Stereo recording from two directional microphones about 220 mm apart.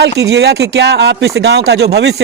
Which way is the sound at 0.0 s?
50° right (ahead or behind).